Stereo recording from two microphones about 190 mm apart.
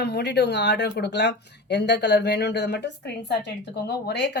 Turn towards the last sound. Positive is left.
turn(degrees=65)  # may be behind; listen again after turning